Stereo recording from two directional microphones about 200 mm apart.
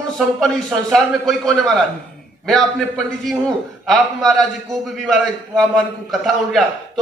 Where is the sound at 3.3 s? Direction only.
Centre (ahead or behind).